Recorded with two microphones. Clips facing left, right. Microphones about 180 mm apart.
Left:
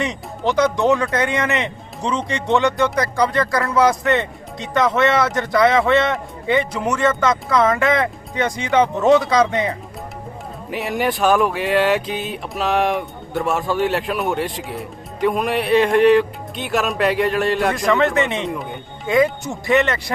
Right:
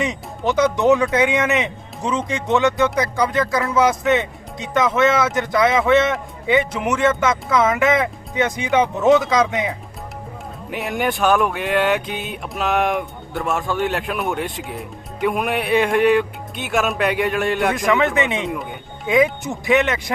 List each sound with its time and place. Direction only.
0.0 s music: centre (ahead or behind)